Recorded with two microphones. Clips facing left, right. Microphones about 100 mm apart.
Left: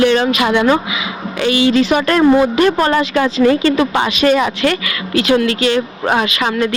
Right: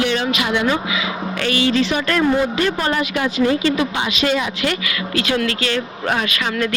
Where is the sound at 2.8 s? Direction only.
70° left (ahead or behind).